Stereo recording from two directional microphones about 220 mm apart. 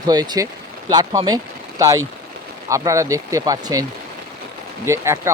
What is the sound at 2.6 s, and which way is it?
Speech, 15° right (ahead or behind).